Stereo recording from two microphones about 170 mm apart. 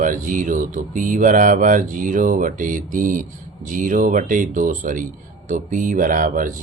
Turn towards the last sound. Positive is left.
turn(degrees=-50)  # may be behind; listen again after turning